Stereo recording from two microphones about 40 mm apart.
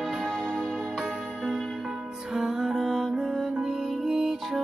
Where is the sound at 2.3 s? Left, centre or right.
Centre.